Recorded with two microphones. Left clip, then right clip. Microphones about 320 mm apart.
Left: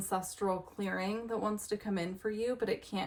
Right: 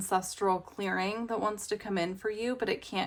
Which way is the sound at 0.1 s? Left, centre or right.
Centre.